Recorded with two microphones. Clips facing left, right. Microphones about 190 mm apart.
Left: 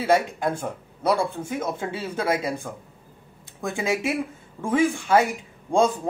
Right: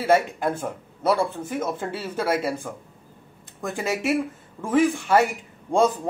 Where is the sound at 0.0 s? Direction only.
5° right (ahead or behind).